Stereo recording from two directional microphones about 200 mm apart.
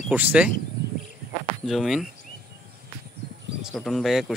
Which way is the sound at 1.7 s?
Centre (ahead or behind).